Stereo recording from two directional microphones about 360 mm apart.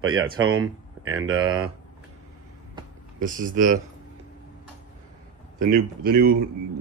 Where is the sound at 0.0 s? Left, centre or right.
Right.